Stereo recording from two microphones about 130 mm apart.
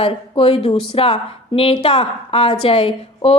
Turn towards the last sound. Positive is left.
turn(degrees=45)  # may be behind; listen again after turning